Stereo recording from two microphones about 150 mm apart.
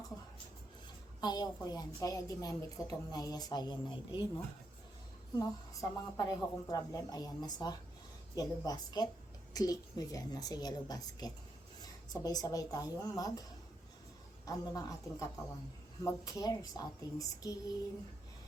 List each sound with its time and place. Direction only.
1.2 s a woman's voice: 25° left (ahead or behind)
5.4 s a woman's voice: 25° left (ahead or behind)
14.4 s a woman's voice: 25° left (ahead or behind)